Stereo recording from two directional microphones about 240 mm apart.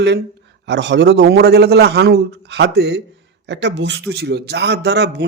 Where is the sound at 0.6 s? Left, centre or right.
Right.